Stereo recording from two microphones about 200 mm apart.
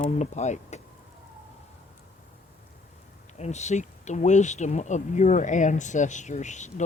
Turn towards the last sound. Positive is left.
turn(degrees=35)  # may be behind; listen again after turning